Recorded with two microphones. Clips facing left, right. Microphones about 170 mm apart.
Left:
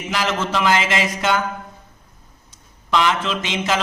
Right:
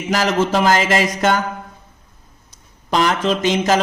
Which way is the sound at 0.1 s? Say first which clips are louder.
Right 5 dB; 40° right (ahead or behind).